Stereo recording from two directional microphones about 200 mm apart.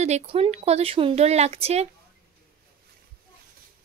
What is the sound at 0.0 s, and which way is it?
Speech, 30° right (ahead or behind).